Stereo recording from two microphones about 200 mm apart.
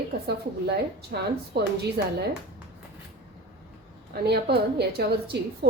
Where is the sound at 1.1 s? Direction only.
55° right (ahead or behind).